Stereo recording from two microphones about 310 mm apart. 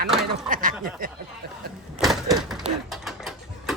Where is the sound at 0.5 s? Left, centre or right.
Right.